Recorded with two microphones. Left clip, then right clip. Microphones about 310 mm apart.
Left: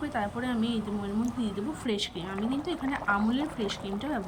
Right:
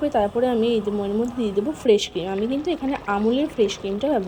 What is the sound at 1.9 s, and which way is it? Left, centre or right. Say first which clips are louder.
Speech: right 11 dB; centre.